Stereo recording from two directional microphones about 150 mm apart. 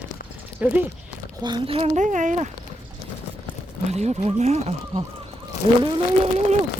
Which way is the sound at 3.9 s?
45° right (ahead or behind).